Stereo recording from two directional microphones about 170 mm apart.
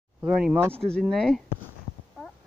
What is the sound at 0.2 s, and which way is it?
Speech, 10° right (ahead or behind).